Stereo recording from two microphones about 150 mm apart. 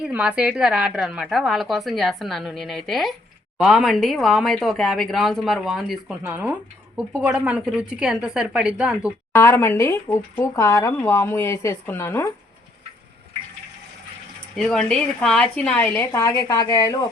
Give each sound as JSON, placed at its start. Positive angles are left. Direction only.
{"t": 0.1, "sound": "speech", "side_deg": -10}
{"t": 9.3, "sound": "speech", "side_deg": 15}
{"t": 14.5, "sound": "speech", "side_deg": 5}